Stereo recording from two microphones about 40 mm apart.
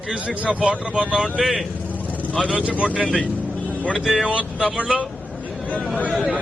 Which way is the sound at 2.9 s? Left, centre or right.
Left.